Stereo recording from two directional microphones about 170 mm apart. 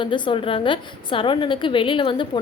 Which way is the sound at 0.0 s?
30° left (ahead or behind).